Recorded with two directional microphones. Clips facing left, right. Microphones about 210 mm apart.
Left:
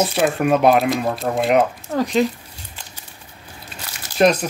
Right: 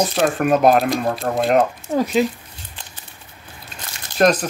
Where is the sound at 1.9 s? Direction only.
10° right (ahead or behind).